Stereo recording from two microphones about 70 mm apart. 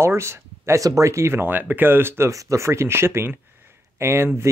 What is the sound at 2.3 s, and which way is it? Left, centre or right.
Speech, right.